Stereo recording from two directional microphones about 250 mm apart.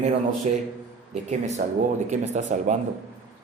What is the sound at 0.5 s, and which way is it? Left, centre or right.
Speech, right.